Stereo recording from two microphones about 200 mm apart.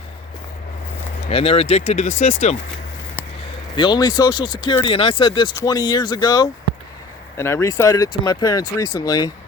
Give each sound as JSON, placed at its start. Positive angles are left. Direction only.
{"t": 1.3, "sound": "speech", "side_deg": 30}
{"t": 3.8, "sound": "speech", "side_deg": 20}